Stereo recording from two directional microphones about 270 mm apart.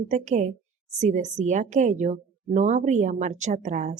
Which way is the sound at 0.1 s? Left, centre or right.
Right.